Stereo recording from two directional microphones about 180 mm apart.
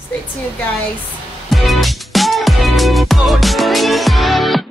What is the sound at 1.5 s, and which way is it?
Music, centre (ahead or behind).